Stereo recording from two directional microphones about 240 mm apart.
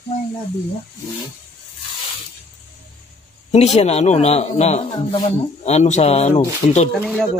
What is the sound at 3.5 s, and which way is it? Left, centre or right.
Speech, left.